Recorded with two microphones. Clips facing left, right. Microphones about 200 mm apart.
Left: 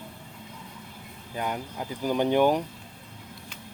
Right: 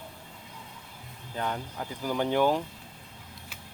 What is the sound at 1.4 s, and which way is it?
Speech, 15° left (ahead or behind).